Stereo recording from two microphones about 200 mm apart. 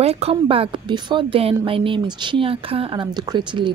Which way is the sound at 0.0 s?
30° right (ahead or behind).